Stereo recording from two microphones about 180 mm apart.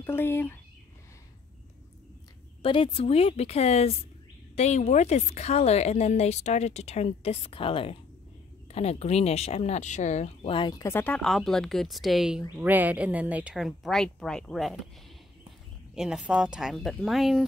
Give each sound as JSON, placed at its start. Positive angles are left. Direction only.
{"t": 0.0, "sound": "speech", "side_deg": 10}
{"t": 2.6, "sound": "speech", "side_deg": 30}
{"t": 15.9, "sound": "speech", "side_deg": -5}